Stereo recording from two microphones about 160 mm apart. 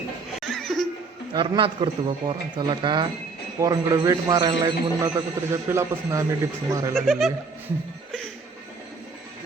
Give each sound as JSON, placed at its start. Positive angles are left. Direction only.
{"t": 0.4, "sound": "laughter", "side_deg": 0}
{"t": 1.3, "sound": "a man's voice", "side_deg": -30}
{"t": 7.0, "sound": "speech", "side_deg": 0}